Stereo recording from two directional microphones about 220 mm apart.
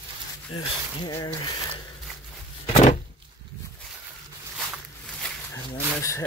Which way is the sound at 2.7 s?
30° left (ahead or behind).